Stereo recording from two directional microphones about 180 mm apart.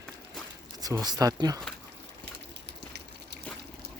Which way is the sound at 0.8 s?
20° right (ahead or behind).